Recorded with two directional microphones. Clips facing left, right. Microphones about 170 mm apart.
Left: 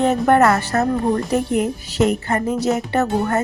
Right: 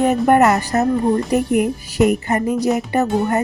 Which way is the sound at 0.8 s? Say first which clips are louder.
Right 2 dB; centre (ahead or behind).